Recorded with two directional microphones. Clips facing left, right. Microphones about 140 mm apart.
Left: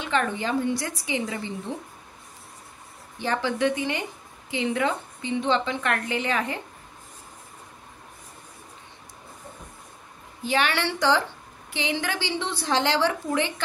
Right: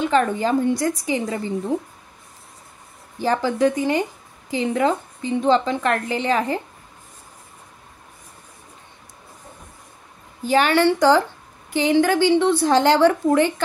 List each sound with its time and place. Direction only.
0.0 s a woman's voice: 40° right (ahead or behind)
3.2 s a woman's voice: 40° right (ahead or behind)
10.4 s a woman's voice: 45° right (ahead or behind)